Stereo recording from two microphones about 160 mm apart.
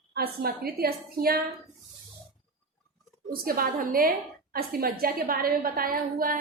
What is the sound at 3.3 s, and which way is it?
A woman's voice, 65° right (ahead or behind).